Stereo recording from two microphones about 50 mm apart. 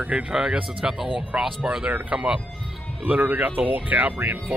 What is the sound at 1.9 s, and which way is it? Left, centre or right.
Speech, right.